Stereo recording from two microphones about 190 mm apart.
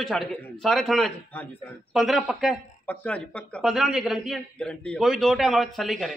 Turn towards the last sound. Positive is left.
turn(degrees=0)  # may be behind; listen again after turning